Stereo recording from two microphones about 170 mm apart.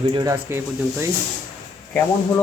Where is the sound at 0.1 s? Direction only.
20° right (ahead or behind).